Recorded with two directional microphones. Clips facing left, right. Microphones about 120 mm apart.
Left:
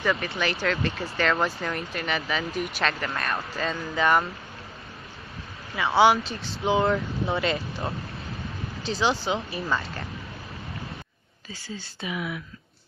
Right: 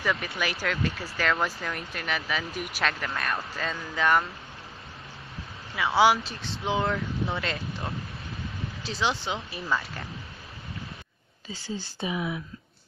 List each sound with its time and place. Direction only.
0.0 s speech: centre (ahead or behind)
5.8 s speech: centre (ahead or behind)
8.8 s speech: centre (ahead or behind)
11.5 s speech: 25° right (ahead or behind)